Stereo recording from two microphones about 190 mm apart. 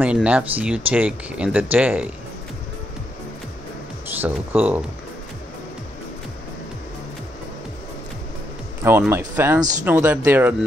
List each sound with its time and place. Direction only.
0.0 s speech: 5° right (ahead or behind)
4.2 s speech: 10° right (ahead or behind)
9.1 s speech: 15° right (ahead or behind)